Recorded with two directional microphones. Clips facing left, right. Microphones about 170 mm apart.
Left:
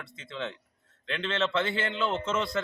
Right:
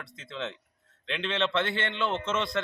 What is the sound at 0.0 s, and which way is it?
Speech, centre (ahead or behind).